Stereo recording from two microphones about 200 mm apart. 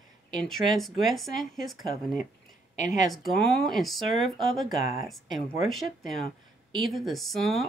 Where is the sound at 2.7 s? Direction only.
40° left (ahead or behind).